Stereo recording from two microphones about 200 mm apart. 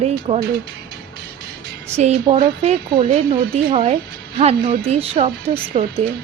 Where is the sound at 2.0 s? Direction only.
30° right (ahead or behind).